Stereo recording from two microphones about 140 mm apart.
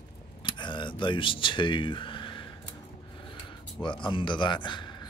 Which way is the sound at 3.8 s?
35° left (ahead or behind).